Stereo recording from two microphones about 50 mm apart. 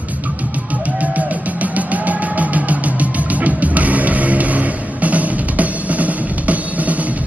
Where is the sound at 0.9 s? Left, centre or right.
Right.